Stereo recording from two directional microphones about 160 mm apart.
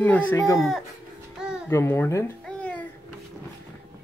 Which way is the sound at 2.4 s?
10° left (ahead or behind).